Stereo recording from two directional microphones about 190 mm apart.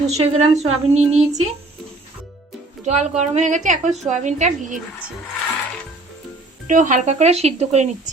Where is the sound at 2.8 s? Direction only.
35° right (ahead or behind).